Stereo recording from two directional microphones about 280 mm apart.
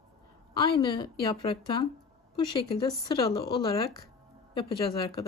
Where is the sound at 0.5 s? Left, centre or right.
Centre.